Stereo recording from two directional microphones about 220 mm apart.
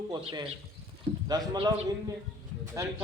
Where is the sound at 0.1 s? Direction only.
20° right (ahead or behind).